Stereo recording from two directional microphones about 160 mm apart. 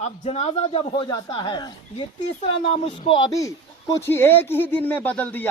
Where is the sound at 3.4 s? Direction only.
20° left (ahead or behind).